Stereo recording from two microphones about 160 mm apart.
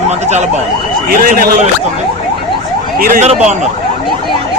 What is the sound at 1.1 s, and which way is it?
Speech, 60° right (ahead or behind).